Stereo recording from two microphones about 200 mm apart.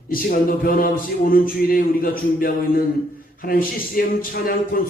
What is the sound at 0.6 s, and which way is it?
A man's voice, 45° left (ahead or behind).